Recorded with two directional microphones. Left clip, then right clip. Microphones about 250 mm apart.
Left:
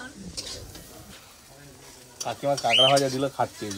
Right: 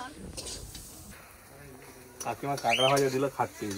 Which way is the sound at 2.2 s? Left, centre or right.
Left.